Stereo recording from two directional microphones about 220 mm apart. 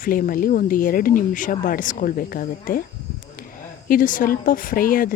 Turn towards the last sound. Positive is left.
turn(degrees=40)  # may be behind; listen again after turning